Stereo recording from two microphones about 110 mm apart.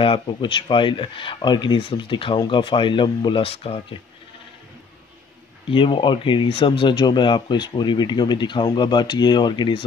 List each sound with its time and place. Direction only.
0.0 s speech: 55° left (ahead or behind)
5.7 s speech: 50° left (ahead or behind)